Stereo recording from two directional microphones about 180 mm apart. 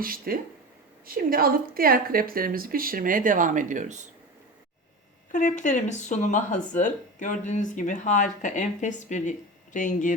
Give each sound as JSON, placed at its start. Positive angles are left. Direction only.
{"t": 0.0, "sound": "a woman's voice", "side_deg": -55}
{"t": 5.3, "sound": "speech", "side_deg": 45}